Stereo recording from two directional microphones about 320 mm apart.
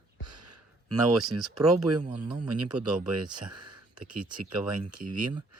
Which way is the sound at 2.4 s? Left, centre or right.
Right.